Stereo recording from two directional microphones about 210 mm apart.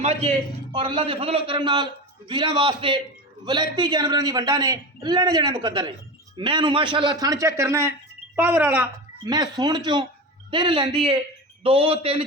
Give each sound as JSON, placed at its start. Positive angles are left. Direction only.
{"t": 0.0, "sound": "a man's voice", "side_deg": -30}